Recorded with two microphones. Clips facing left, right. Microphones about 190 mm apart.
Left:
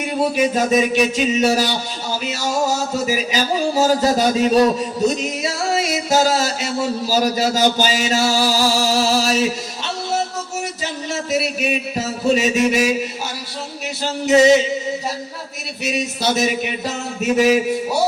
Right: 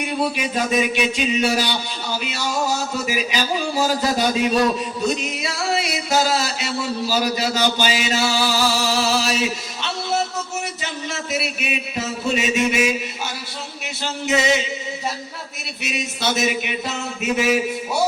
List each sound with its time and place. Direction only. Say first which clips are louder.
0.3 s music: left 5 dB; 45° left (ahead or behind)
11.3 s music: left 7 dB; 40° left (ahead or behind)
14.0 s music: left 8 dB; 40° left (ahead or behind)
15.8 s music: left 4 dB; 40° left (ahead or behind)